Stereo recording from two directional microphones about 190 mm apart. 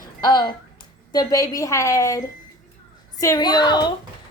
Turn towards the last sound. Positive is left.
turn(degrees=25)  # may be behind; listen again after turning